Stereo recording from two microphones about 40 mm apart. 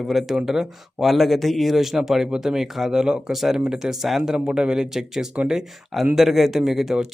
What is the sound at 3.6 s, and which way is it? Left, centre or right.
Speech, centre.